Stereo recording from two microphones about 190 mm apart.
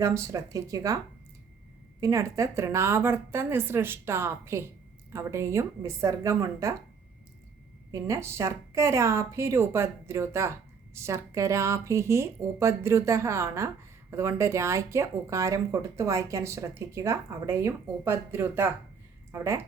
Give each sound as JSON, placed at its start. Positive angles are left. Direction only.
{"t": 0.0, "sound": "speech", "side_deg": -15}
{"t": 2.0, "sound": "speech", "side_deg": -15}
{"t": 7.9, "sound": "speech", "side_deg": -15}